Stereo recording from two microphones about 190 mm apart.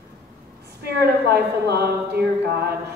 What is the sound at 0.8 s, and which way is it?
A woman's voice, 55° right (ahead or behind).